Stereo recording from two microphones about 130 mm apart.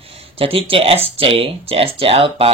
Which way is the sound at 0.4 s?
45° right (ahead or behind).